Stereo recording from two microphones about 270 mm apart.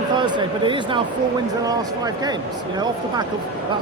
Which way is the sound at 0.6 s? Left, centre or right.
Centre.